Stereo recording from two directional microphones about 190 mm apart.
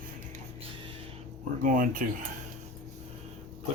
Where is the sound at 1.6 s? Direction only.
45° right (ahead or behind).